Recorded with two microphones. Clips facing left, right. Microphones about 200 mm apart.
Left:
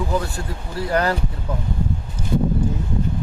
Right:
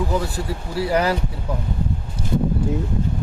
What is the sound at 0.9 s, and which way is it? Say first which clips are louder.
Speech: even; 15° right (ahead or behind).